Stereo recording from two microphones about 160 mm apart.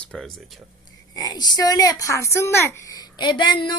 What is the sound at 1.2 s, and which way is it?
Speech, 25° left (ahead or behind).